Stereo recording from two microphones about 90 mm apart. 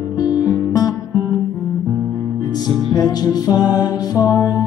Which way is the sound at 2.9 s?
45° left (ahead or behind).